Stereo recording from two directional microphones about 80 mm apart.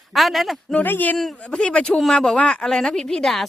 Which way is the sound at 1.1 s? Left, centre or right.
Centre.